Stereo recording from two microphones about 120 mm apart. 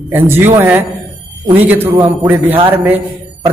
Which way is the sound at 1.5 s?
15° right (ahead or behind).